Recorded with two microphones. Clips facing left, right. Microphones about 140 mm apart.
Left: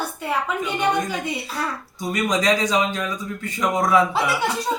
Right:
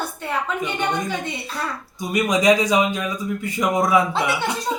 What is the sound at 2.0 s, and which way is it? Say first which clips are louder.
Speech: right 2 dB; 10° right (ahead or behind).